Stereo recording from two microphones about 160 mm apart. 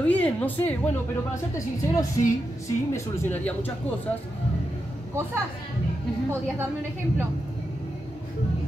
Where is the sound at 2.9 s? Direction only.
10° left (ahead or behind).